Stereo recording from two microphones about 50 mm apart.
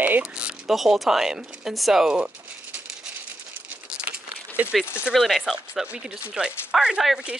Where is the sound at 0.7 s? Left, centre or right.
Centre.